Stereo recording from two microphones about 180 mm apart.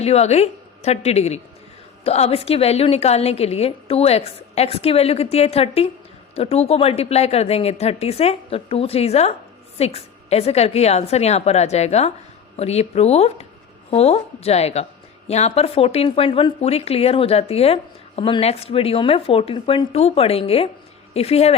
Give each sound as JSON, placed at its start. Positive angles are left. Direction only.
{"t": 0.0, "sound": "a woman's voice", "side_deg": 35}